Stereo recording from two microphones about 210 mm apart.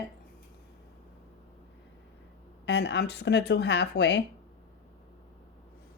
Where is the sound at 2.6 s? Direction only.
55° left (ahead or behind).